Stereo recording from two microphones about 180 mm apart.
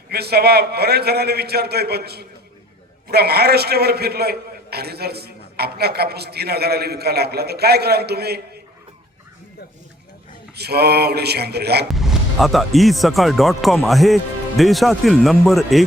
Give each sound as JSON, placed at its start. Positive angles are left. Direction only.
{"t": 0.1, "sound": "a man's voice", "side_deg": -60}
{"t": 10.5, "sound": "a man's voice", "side_deg": -65}
{"t": 11.9, "sound": "speech", "side_deg": 0}